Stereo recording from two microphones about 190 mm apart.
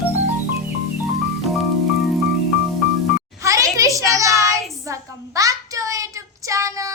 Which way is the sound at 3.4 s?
15° right (ahead or behind).